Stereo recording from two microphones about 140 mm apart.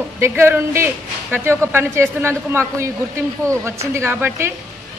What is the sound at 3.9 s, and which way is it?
Speech, 15° right (ahead or behind).